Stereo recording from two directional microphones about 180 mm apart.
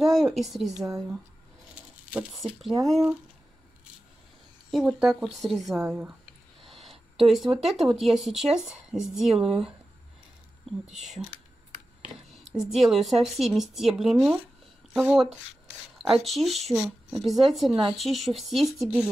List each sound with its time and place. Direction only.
0.0 s speech: centre (ahead or behind)
0.7 s speech: 15° right (ahead or behind)
1.8 s a sound: 5° right (ahead or behind)
4.6 s speech: centre (ahead or behind)
5.8 s speech: 10° right (ahead or behind)
6.6 s a sound: centre (ahead or behind)
7.6 s speech: centre (ahead or behind)
10.9 s speech: centre (ahead or behind)
12.3 s speech: centre (ahead or behind)